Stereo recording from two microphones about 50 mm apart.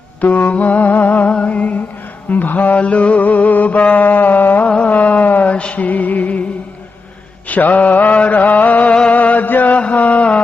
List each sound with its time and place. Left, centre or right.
0.2 s music: left
0.5 s humming: left
1.3 s a sound: left
2.3 s mantra: left
4.6 s music: left
7.4 s mantra: left
9.0 s chant: left
9.8 s a sound: left